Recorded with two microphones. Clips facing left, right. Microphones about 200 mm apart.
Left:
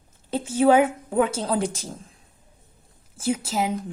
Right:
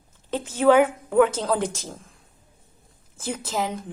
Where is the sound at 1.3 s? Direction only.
10° left (ahead or behind).